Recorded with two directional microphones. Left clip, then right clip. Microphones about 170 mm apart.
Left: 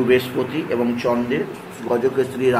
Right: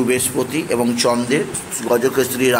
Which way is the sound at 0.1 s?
15° right (ahead or behind).